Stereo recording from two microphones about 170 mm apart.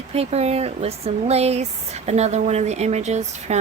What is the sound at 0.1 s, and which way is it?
Speech, 40° right (ahead or behind).